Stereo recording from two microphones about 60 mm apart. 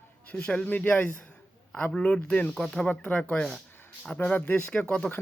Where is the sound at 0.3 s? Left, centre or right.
Centre.